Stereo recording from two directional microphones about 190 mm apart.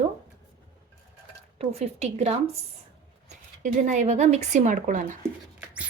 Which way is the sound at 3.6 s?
40° right (ahead or behind).